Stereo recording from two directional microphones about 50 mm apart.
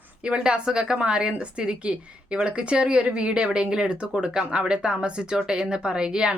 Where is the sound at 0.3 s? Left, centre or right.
Right.